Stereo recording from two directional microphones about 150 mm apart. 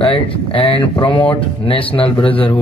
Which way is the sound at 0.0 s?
35° left (ahead or behind).